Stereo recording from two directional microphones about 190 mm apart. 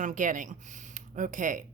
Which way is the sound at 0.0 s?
40° right (ahead or behind).